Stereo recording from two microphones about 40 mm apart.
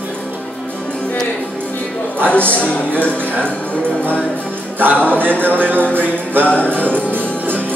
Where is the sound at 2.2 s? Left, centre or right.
Left.